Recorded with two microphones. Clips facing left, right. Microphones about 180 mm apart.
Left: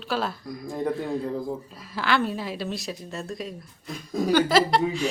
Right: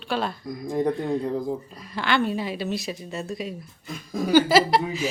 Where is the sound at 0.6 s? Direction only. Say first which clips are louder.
Right 5 dB; 20° right (ahead or behind).